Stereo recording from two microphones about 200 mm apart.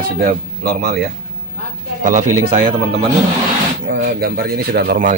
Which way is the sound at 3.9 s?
55° right (ahead or behind).